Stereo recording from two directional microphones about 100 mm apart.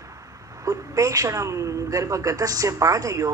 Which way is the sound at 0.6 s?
35° right (ahead or behind).